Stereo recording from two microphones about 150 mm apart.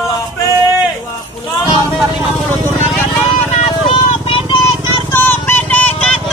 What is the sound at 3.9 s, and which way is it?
Vehicle, 35° left (ahead or behind).